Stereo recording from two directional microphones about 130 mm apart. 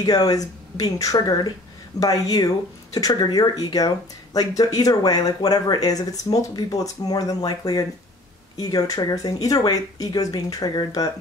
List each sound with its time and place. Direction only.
0.0 s speech: 30° left (ahead or behind)